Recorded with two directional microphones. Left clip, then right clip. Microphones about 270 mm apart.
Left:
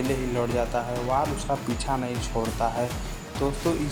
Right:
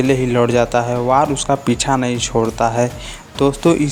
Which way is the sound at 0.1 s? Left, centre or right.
Right.